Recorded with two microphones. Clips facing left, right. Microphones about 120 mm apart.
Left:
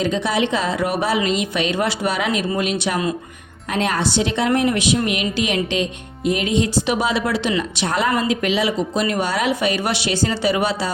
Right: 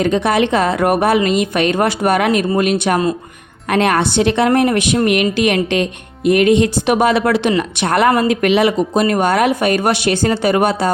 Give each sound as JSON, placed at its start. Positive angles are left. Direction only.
{"t": 0.0, "sound": "a woman's voice", "side_deg": -60}